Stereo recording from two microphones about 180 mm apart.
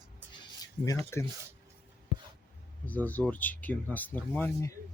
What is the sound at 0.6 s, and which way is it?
Speech, 15° left (ahead or behind).